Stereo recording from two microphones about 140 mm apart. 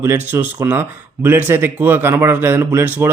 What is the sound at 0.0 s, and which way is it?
Speech, 15° right (ahead or behind).